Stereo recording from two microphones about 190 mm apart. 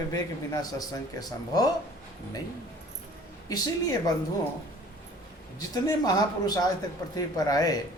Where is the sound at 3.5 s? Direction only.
20° left (ahead or behind).